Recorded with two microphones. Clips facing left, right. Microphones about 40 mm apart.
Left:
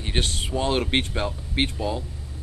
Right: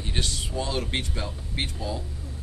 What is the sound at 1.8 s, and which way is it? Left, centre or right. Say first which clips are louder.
Speech: left 5 dB; left.